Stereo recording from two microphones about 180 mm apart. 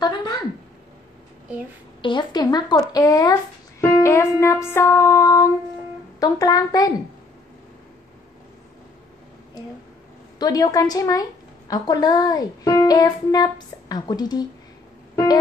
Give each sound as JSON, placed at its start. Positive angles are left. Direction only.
{"t": 0.0, "sound": "a sound", "side_deg": 25}
{"t": 2.0, "sound": "a woman's voice", "side_deg": 25}
{"t": 4.0, "sound": "music", "side_deg": 15}
{"t": 6.1, "sound": "a woman's voice", "side_deg": 20}
{"t": 10.4, "sound": "a woman's voice", "side_deg": 20}